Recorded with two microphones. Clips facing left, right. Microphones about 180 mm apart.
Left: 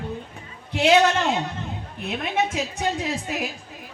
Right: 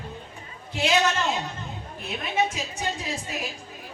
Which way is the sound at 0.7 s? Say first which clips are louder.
Left 6 dB; 65° left (ahead or behind).